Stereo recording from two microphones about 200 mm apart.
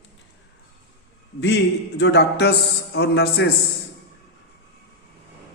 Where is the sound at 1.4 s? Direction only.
60° left (ahead or behind).